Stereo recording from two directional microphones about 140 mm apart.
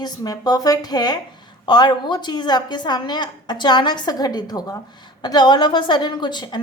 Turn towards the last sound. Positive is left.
turn(degrees=35)  # may be behind; listen again after turning